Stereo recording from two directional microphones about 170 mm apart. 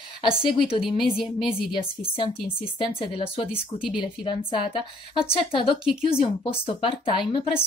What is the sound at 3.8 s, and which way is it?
A woman's voice, 30° left (ahead or behind).